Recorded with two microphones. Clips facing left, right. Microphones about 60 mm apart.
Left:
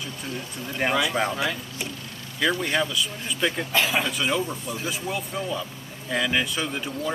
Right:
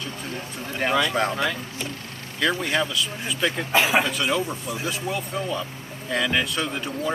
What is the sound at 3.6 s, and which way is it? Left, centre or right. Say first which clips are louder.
Speech: right 6 dB; right.